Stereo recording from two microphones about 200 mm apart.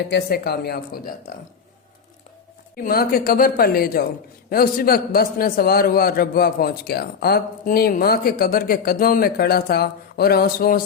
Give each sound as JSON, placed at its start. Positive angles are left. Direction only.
{"t": 0.1, "sound": "a man's voice", "side_deg": 50}
{"t": 2.7, "sound": "a man's voice", "side_deg": 45}